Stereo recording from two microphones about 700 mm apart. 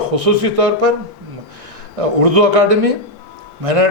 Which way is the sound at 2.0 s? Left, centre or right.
Right.